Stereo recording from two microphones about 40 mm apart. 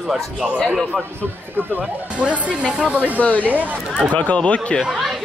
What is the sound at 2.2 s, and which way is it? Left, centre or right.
Speech, right.